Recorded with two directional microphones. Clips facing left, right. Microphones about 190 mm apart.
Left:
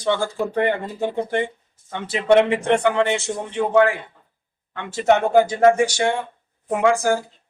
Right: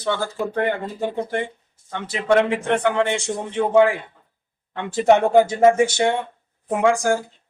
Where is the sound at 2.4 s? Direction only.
15° left (ahead or behind).